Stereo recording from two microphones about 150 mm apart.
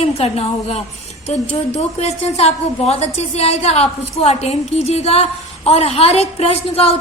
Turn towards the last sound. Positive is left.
turn(degrees=40)  # may be behind; listen again after turning